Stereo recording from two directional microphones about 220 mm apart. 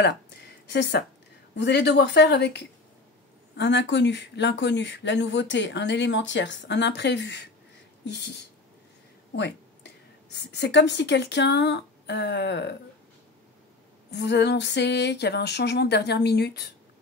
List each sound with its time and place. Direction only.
0.7 s speech: 50° left (ahead or behind)
9.3 s speech: 50° left (ahead or behind)
14.1 s speech: 50° left (ahead or behind)